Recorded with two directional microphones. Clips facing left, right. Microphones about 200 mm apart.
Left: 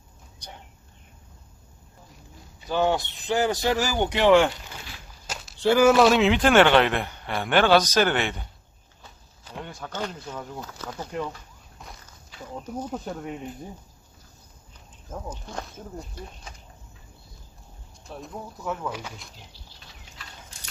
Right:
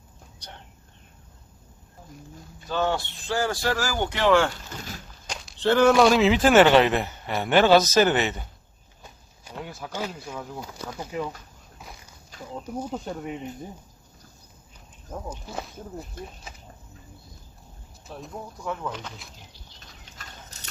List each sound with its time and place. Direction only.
2.6 s speech: 15° left (ahead or behind)
5.2 s speech: 5° left (ahead or behind)
9.4 s speech: 10° right (ahead or behind)
11.8 s walk: 5° right (ahead or behind)
12.6 s speech: 10° right (ahead or behind)
15.3 s speech: 5° right (ahead or behind)
18.0 s speech: centre (ahead or behind)
20.2 s a sound: 45° right (ahead or behind)